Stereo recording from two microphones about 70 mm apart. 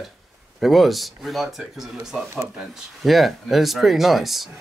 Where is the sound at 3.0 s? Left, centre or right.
Centre.